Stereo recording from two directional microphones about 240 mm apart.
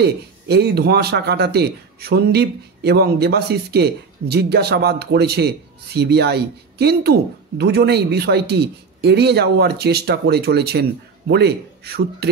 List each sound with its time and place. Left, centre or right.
0.0 s speech: right